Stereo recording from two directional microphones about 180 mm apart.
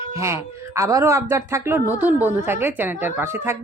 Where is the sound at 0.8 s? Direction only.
15° right (ahead or behind).